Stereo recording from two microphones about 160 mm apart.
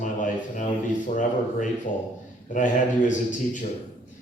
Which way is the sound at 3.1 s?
50° left (ahead or behind).